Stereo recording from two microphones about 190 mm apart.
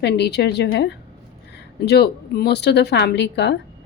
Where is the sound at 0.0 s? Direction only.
60° left (ahead or behind).